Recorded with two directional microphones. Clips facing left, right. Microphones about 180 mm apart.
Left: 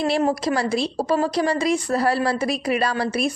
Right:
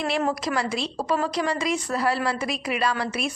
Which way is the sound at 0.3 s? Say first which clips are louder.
Left 4 dB; 35° left (ahead or behind).